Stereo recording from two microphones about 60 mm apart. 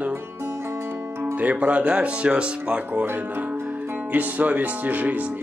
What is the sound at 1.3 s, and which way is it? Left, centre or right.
Speech, right.